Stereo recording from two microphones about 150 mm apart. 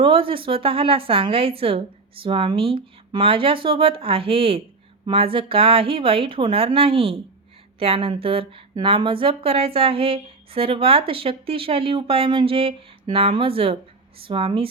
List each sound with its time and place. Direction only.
0.0 s speech: 35° right (ahead or behind)